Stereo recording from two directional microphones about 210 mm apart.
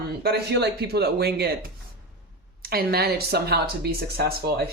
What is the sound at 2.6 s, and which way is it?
Speech, 45° right (ahead or behind).